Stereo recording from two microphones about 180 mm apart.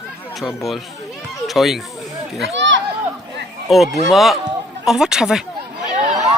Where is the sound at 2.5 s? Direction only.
90° right.